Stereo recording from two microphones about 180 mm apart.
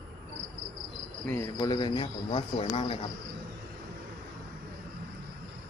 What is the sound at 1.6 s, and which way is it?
Speech, 25° left (ahead or behind).